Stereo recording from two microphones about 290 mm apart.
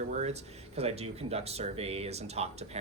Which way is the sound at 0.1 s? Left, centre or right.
Right.